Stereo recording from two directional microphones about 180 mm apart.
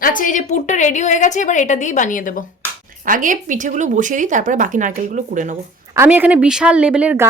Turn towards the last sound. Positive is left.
turn(degrees=-5)  # may be behind; listen again after turning